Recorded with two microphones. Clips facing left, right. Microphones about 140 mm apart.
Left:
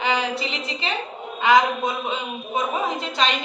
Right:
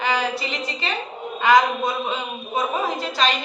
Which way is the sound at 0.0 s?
25° left (ahead or behind).